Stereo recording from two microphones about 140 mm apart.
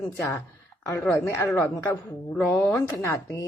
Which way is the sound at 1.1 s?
20° left (ahead or behind).